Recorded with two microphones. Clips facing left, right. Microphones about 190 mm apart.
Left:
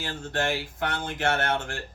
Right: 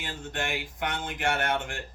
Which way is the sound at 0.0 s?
15° right (ahead or behind).